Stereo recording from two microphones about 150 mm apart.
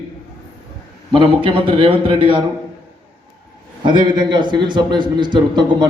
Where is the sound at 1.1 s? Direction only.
30° right (ahead or behind).